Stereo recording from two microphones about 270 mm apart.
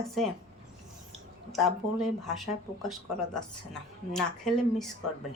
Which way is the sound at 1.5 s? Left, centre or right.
Centre.